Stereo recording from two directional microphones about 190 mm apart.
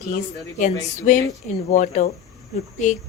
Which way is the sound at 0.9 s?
40° left (ahead or behind).